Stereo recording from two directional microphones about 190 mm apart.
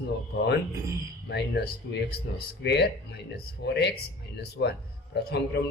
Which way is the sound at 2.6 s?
60° left (ahead or behind).